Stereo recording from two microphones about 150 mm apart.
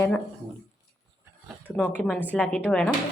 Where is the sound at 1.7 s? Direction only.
10° left (ahead or behind).